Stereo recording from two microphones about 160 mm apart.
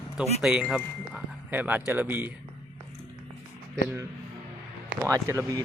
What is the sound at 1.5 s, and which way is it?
Speech, 10° right (ahead or behind).